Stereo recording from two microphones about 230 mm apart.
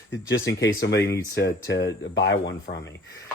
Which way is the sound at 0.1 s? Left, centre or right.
Left.